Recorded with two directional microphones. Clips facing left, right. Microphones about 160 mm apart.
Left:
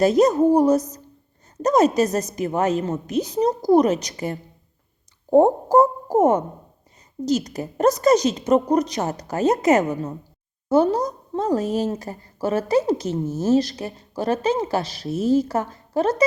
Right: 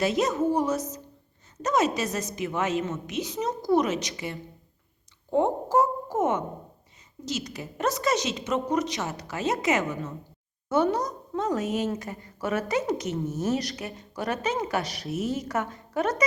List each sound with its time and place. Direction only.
0.0 s a woman's voice: 40° left (ahead or behind)